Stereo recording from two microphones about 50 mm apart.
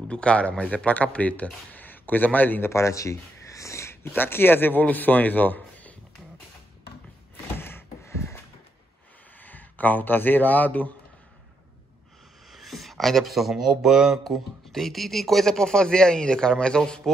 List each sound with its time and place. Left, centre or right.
0.1 s speech: left
2.6 s speech: left
7.5 s a sound: left
9.4 s speech: left
12.4 s speech: centre
14.2 s speech: centre